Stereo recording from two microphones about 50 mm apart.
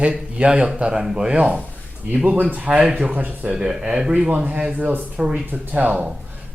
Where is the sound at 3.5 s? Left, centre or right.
Centre.